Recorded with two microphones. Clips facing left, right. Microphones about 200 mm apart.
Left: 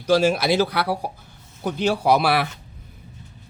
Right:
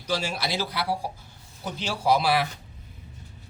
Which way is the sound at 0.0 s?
50° left (ahead or behind).